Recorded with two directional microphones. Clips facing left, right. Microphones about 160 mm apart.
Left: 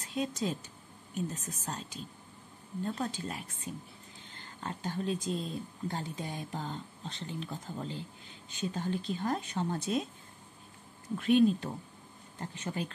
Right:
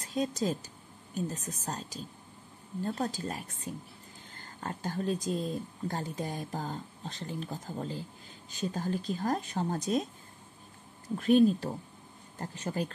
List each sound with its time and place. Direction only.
0.0 s speech: 40° right (ahead or behind)
11.1 s speech: 40° right (ahead or behind)